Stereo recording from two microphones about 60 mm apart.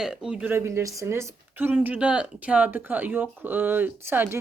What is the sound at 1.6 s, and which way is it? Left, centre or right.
Speech, right.